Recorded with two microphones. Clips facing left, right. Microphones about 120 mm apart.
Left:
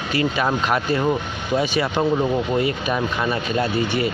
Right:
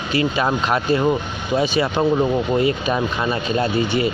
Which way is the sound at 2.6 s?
25° right (ahead or behind).